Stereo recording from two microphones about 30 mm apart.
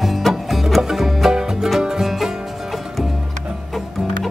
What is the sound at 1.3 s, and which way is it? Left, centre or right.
Music, centre.